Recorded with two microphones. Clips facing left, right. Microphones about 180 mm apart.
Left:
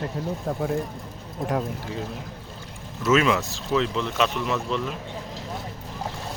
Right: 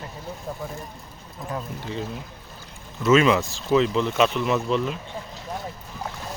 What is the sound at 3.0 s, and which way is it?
Speech, 5° left (ahead or behind).